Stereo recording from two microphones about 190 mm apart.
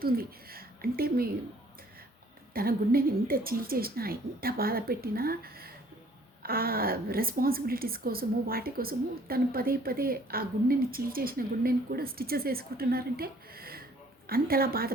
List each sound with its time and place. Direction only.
0.0 s speech: 50° right (ahead or behind)
2.5 s a woman's voice: 50° right (ahead or behind)